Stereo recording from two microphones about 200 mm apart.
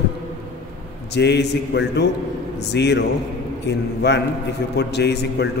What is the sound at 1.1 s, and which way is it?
A man's voice, 60° left (ahead or behind).